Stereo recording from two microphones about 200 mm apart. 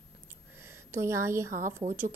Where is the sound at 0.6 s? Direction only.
10° right (ahead or behind).